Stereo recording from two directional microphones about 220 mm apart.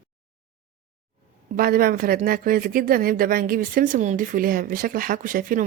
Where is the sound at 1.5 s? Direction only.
40° right (ahead or behind).